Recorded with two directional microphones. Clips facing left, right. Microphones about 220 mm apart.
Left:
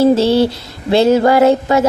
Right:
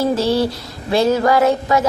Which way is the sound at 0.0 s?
25° left (ahead or behind).